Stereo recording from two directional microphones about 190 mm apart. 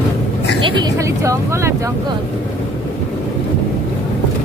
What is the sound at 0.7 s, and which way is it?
Speech, 20° right (ahead or behind).